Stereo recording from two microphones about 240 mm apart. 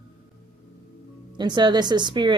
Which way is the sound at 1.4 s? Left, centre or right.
Centre.